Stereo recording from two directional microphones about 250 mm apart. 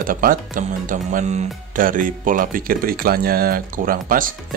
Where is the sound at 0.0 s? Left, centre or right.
Right.